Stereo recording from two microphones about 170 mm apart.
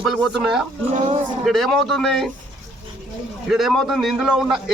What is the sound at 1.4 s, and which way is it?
Speech, centre (ahead or behind).